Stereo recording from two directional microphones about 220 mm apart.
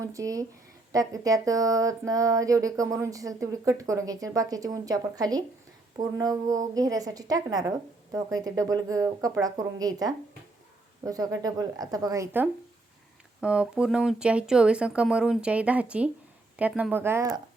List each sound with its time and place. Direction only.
0.0 s speech: 15° right (ahead or behind)